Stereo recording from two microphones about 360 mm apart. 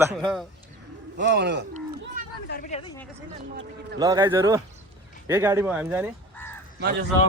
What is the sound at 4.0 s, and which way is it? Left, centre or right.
A man's voice, centre.